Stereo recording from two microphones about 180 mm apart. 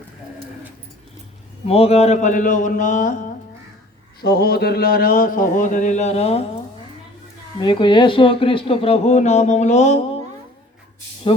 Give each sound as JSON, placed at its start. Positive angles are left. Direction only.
{"t": 1.6, "sound": "speech", "side_deg": 35}
{"t": 4.2, "sound": "speech", "side_deg": 60}
{"t": 7.6, "sound": "speech", "side_deg": 25}